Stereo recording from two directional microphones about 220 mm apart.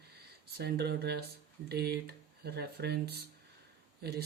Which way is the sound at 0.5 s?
45° right (ahead or behind).